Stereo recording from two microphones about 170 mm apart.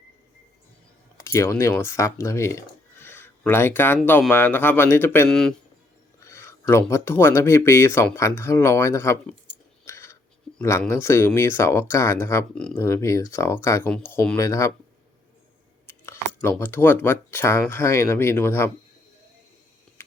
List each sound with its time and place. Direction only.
1.2 s speech: 20° left (ahead or behind)
6.1 s speech: 15° left (ahead or behind)
9.8 s whispering: 15° left (ahead or behind)
10.6 s speech: 15° left (ahead or behind)
12.8 s speech: 15° left (ahead or behind)
15.9 s speech: 15° left (ahead or behind)